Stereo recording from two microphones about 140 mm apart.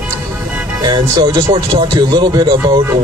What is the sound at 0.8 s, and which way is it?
Speech, 30° right (ahead or behind).